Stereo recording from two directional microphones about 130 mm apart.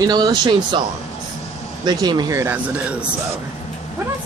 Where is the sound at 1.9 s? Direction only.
30° right (ahead or behind); by 3.1 s 10° right (ahead or behind).